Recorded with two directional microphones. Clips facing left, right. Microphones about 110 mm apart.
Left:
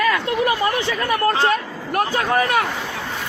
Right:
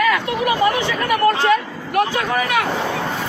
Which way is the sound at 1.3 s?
35° left (ahead or behind).